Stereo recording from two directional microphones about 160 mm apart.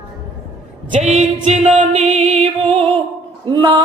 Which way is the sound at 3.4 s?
30° right (ahead or behind).